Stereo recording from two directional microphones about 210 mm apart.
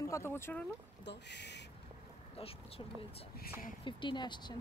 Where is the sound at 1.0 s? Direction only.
55° left (ahead or behind).